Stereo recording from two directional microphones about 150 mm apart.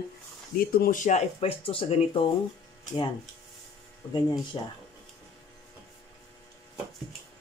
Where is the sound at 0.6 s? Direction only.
75° left (ahead or behind); by 1.2 s 60° left (ahead or behind).